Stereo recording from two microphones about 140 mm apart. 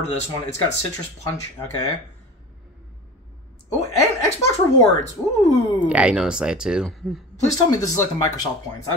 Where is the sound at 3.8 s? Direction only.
20° left (ahead or behind).